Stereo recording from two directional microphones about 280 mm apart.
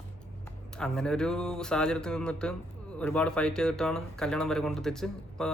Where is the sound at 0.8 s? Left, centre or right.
Centre.